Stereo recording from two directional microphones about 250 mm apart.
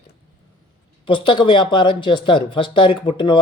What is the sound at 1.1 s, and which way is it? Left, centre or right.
Speech, centre.